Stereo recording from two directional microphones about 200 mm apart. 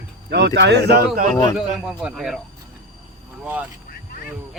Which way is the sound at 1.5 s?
5° right (ahead or behind).